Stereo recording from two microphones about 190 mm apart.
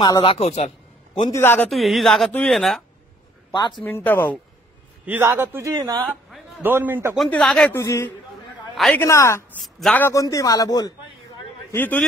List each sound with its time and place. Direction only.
0.0 s a woman's voice: 25° left (ahead or behind)
1.3 s a man's voice: 10° left (ahead or behind)
1.7 s speech: centre (ahead or behind)
3.5 s a woman's voice: 25° left (ahead or behind)
3.8 s a man's voice: 10° left (ahead or behind)
5.0 s a man's voice: 10° right (ahead or behind)
6.6 s a man's voice: 10° right (ahead or behind)
7.2 s a man's voice: 5° left (ahead or behind)
8.7 s a woman's voice: centre (ahead or behind)
9.0 s a man's voice: 15° left (ahead or behind)
9.6 s a man's voice: centre (ahead or behind); by 11.0 s 20° left (ahead or behind)
11.7 s a man's voice: 10° left (ahead or behind)